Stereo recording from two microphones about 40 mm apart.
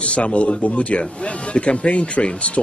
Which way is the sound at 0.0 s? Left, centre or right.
Left.